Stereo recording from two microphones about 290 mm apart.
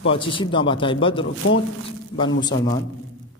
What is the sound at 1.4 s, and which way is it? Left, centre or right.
Speech, left.